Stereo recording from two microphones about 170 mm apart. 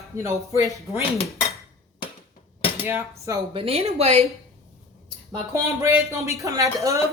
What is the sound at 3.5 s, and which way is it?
Speech, 35° right (ahead or behind).